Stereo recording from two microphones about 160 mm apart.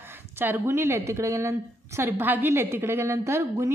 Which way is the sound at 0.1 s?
15° right (ahead or behind).